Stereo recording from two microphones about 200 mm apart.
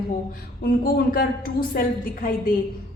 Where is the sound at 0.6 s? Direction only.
50° left (ahead or behind).